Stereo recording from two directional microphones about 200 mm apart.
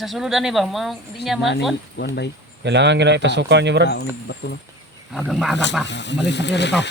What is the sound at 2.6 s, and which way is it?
Speech, 60° right (ahead or behind).